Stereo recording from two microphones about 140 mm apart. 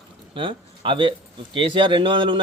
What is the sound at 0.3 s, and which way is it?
A man's voice, 35° right (ahead or behind).